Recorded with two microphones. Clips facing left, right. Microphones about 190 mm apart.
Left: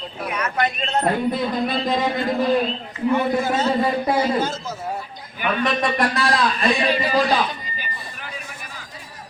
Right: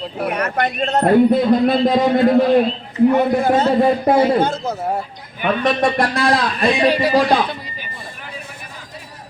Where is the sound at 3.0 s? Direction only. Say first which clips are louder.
Right 5 dB; 55° right (ahead or behind).